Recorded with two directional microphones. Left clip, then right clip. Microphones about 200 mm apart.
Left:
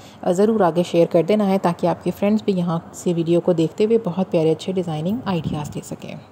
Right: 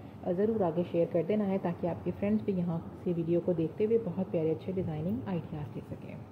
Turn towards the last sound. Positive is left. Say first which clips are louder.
# left 13 dB
turn(degrees=45)  # may be behind; listen again after turning